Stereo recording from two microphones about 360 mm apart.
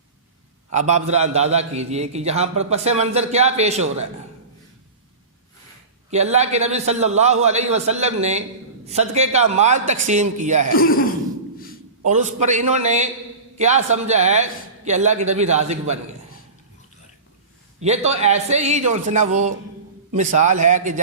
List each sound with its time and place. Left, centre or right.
0.7 s a man's voice: centre
6.1 s a man's voice: centre
10.8 s speech: left
12.0 s speech: centre
17.7 s a man's voice: centre